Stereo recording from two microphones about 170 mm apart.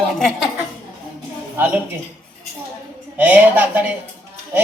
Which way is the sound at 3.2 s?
10° right (ahead or behind).